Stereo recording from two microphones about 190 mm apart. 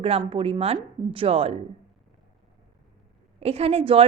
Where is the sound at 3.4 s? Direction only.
30° right (ahead or behind).